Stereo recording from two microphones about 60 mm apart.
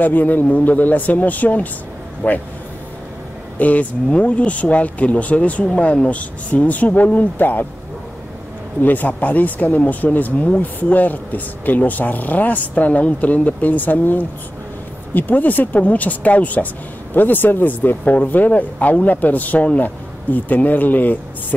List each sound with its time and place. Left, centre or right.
0.0 s a man's voice: left
3.5 s speech: left
8.8 s speech: left